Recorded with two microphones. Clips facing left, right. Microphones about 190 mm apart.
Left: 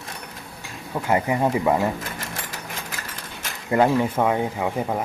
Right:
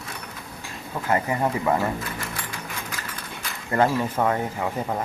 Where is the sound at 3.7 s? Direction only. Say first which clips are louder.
Left 3 dB; 10° left (ahead or behind).